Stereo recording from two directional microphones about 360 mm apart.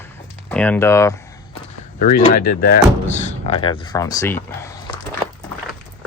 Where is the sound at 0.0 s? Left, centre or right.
Centre.